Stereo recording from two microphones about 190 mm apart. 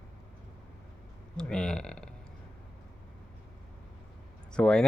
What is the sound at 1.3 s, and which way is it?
Speech, 5° left (ahead or behind).